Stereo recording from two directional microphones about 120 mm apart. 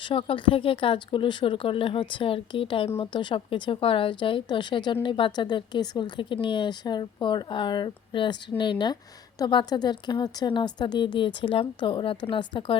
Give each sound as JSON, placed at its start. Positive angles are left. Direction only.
{"t": 0.0, "sound": "speech", "side_deg": 50}